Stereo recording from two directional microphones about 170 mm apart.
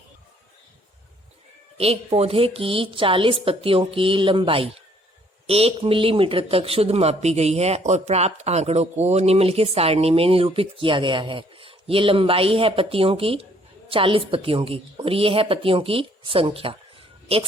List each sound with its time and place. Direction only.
1.8 s speech: 35° right (ahead or behind)